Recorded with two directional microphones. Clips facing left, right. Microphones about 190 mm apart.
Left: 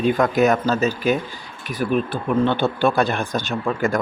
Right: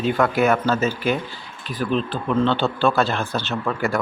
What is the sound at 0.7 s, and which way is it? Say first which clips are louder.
Speech: left 2 dB; 40° left (ahead or behind).